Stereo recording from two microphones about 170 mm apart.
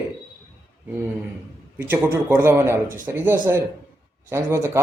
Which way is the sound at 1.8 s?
15° right (ahead or behind).